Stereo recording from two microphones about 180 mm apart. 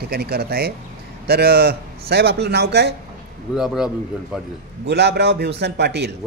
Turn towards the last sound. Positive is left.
turn(degrees=-65)  # may be behind; listen again after turning